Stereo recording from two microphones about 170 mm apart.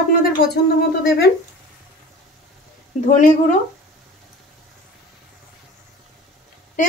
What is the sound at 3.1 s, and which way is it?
Speech, 45° left (ahead or behind).